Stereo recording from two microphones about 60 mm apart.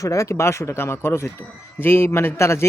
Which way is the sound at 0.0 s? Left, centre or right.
Left.